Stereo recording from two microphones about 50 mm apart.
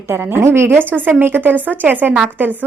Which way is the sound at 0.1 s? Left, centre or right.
Right.